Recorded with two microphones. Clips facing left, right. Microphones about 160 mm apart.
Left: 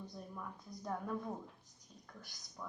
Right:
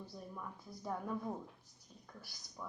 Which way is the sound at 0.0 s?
5° right (ahead or behind).